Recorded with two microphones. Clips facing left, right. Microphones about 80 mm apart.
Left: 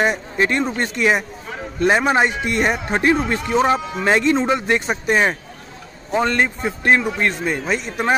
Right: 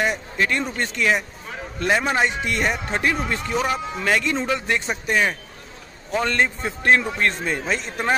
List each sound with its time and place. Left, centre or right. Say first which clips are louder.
0.0 s a man's voice: left 4 dB; left; by 8.2 s centre